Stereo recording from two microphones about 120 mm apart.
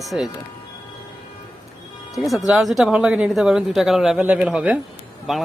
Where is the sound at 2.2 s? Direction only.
Centre (ahead or behind).